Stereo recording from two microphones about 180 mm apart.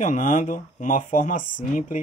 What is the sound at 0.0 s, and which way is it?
Speech, 45° left (ahead or behind).